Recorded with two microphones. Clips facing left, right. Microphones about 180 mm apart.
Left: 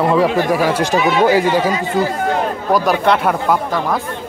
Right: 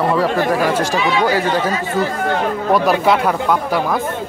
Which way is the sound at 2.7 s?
Centre (ahead or behind).